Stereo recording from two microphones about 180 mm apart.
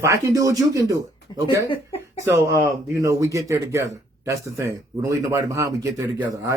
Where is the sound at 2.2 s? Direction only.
15° right (ahead or behind).